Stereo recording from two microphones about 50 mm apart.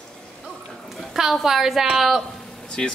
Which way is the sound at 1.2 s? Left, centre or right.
Centre.